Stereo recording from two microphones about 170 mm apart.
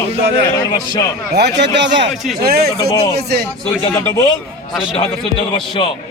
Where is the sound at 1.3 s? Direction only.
85° right.